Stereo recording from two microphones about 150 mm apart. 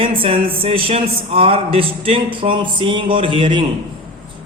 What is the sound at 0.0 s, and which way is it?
A man's voice, 35° right (ahead or behind).